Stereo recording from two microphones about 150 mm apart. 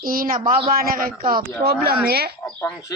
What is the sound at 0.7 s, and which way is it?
Speech, 75° right (ahead or behind).